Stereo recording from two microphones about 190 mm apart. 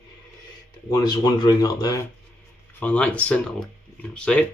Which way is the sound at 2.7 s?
10° left (ahead or behind).